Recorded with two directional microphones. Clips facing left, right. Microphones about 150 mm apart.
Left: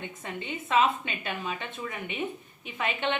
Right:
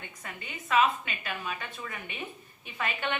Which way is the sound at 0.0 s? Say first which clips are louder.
Left 6 dB; 25° left (ahead or behind).